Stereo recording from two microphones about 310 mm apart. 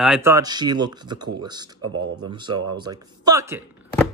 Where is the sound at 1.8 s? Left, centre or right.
Right.